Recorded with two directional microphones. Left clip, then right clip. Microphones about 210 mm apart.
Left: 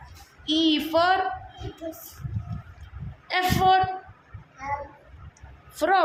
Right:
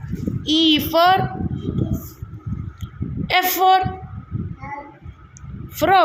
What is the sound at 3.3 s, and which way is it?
Speech, 15° right (ahead or behind).